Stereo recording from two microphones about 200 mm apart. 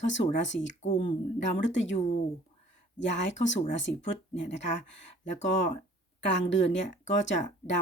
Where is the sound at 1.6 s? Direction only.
65° left (ahead or behind).